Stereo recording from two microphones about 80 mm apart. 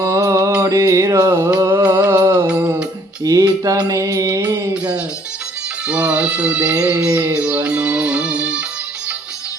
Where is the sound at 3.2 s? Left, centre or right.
Right.